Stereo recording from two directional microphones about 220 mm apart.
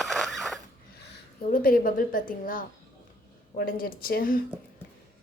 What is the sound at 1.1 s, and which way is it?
A woman's voice, 40° left (ahead or behind).